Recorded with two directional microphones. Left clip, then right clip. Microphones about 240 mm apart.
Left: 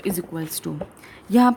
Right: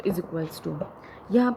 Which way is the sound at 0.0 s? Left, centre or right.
Left.